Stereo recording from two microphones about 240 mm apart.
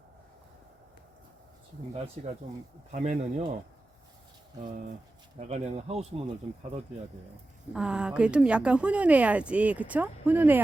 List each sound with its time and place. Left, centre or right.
2.9 s speech: right
5.5 s speech: right
7.7 s speech: centre